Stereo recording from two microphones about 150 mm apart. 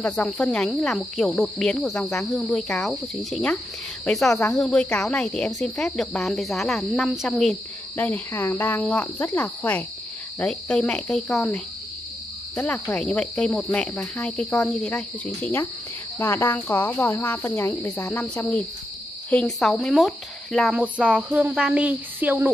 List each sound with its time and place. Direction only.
0.0 s cricket: 5° left (ahead or behind)
8.0 s speech: 15° left (ahead or behind)
10.4 s cricket: 5° left (ahead or behind)
12.5 s speech: 10° left (ahead or behind)
19.3 s cricket: 5° left (ahead or behind)
20.8 s a sound: 5° right (ahead or behind)